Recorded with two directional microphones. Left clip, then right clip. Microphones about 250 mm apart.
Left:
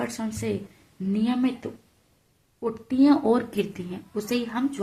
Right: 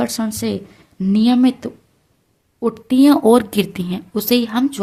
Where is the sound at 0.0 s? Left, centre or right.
Right.